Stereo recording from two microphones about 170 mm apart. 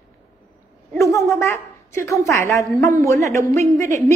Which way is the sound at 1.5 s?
15° left (ahead or behind).